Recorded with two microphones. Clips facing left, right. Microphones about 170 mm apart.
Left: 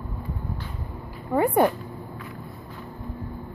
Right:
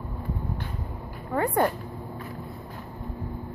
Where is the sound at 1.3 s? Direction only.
15° left (ahead or behind).